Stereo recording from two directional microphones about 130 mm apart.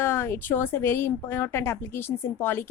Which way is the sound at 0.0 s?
20° left (ahead or behind).